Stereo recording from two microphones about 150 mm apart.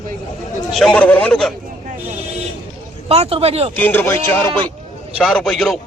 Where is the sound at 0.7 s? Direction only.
Centre (ahead or behind).